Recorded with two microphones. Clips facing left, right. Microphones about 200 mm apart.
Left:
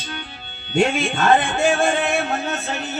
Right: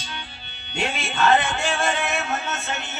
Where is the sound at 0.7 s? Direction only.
50° left (ahead or behind).